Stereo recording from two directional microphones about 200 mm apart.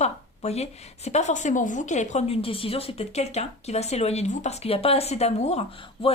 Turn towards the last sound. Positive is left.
turn(degrees=30)  # may be behind; listen again after turning